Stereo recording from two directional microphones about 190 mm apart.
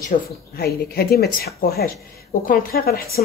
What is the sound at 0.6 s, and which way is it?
Speech, 55° left (ahead or behind).